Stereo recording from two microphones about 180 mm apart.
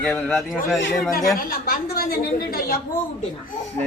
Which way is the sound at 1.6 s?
55° left (ahead or behind).